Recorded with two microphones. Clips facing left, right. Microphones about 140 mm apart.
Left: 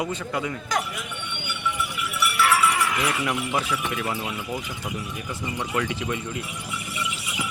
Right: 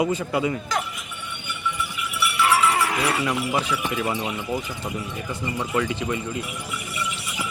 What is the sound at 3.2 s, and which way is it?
Speech, centre (ahead or behind).